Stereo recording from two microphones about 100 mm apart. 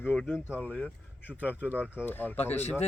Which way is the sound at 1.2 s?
15° right (ahead or behind).